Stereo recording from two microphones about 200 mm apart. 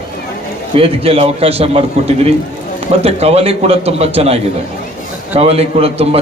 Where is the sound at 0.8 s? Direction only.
30° right (ahead or behind).